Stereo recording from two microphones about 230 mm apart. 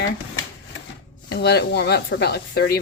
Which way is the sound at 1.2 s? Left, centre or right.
Left.